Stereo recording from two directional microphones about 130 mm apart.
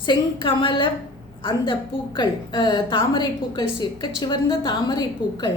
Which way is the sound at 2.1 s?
35° left (ahead or behind).